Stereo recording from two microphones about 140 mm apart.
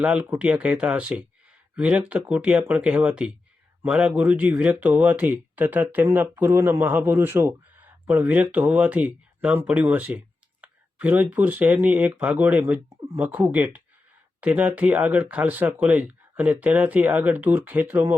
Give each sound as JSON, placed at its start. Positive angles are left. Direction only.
{"t": 0.0, "sound": "speech", "side_deg": -5}